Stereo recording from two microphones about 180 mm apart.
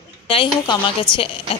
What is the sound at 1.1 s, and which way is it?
Speech, 5° left (ahead or behind).